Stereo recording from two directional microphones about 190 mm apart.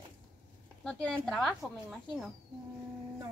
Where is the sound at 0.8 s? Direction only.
5° left (ahead or behind).